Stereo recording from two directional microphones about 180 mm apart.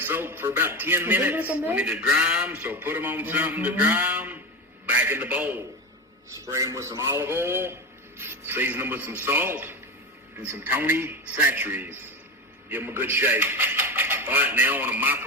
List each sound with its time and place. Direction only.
0.0 s a man's voice: 10° right (ahead or behind)